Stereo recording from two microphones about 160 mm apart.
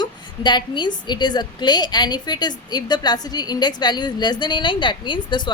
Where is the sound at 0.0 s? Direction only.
30° left (ahead or behind).